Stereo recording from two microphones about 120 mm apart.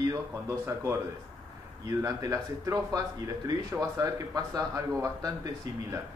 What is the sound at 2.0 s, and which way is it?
Speech, 30° right (ahead or behind).